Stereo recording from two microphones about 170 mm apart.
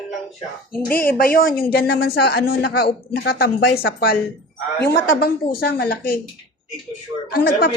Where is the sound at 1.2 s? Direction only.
55° left (ahead or behind).